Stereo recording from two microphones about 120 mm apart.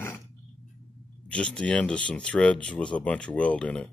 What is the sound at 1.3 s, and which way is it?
Speech, 10° left (ahead or behind).